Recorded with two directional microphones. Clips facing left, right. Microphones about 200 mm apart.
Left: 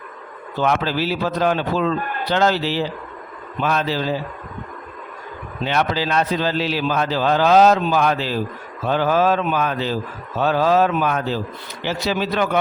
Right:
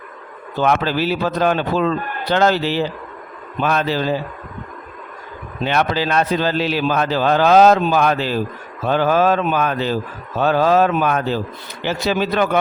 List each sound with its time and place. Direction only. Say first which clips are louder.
0.6 s a man's voice: right 2 dB; 55° right (ahead or behind)
5.6 s a man's voice: right 2 dB; 55° right (ahead or behind)